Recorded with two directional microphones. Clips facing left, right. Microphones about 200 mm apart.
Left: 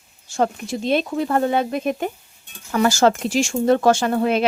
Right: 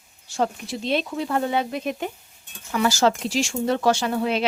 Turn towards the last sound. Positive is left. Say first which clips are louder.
# left 4 dB
turn(degrees=50)  # may be behind; listen again after turning